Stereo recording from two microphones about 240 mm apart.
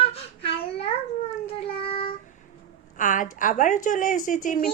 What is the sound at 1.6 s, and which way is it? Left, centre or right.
Child singing, left.